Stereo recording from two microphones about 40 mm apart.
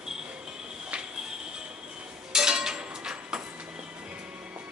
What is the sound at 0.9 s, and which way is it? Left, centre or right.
Music, right.